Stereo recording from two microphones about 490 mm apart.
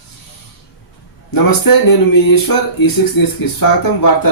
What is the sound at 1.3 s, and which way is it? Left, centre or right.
Speech, left.